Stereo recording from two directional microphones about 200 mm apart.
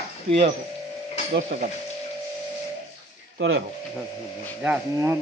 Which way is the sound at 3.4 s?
70° right (ahead or behind).